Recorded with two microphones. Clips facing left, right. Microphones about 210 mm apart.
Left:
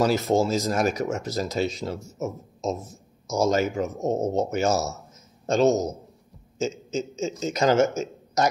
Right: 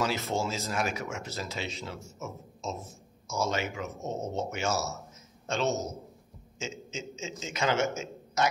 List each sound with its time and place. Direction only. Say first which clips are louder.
0.0 s speech: left 9 dB; 40° left (ahead or behind)